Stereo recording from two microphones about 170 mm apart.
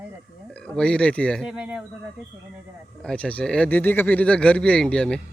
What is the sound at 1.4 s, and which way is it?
Speech, 5° right (ahead or behind).